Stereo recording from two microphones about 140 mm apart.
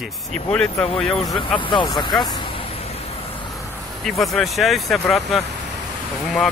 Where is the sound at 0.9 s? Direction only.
40° left (ahead or behind).